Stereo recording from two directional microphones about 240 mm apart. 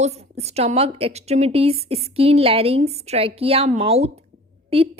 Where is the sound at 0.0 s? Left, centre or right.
Right.